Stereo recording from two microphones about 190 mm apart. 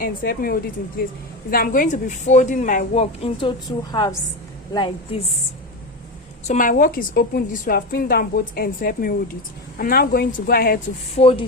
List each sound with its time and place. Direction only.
0.0 s a woman's voice: 50° left (ahead or behind); by 5.2 s 25° left (ahead or behind)
6.5 s a woman's voice: 45° left (ahead or behind)
11.2 s a woman's voice: 30° left (ahead or behind)